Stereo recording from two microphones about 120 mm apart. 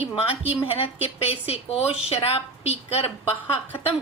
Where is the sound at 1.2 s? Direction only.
55° left (ahead or behind).